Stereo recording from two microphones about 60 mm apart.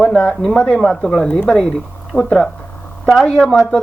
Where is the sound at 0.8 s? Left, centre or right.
Centre.